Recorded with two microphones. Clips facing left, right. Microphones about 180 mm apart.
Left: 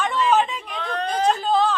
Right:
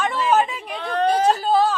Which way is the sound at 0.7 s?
45° right (ahead or behind).